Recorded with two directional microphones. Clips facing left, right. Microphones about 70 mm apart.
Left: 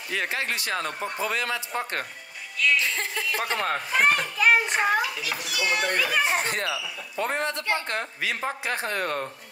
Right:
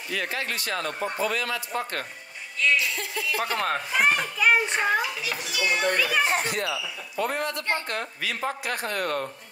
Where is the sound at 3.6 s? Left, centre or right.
Centre.